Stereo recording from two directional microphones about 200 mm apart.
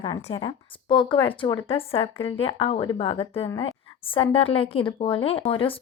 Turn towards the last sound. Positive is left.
turn(degrees=25)  # may be behind; listen again after turning